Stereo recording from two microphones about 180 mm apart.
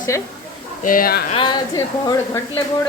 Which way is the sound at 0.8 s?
50° left (ahead or behind).